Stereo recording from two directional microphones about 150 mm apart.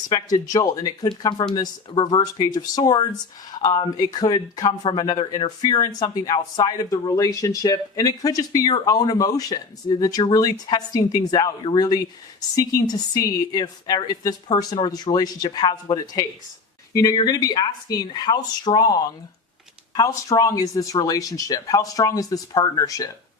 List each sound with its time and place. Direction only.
0.1 s speech: 25° left (ahead or behind)